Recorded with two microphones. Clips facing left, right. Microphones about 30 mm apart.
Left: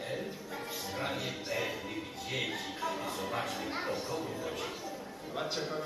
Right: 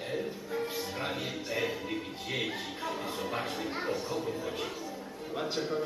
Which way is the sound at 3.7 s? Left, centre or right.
Centre.